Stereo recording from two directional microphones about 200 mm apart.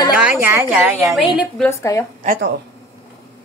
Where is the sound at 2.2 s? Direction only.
45° right (ahead or behind).